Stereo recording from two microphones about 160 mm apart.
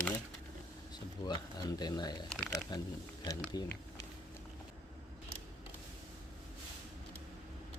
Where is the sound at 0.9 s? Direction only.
25° left (ahead or behind).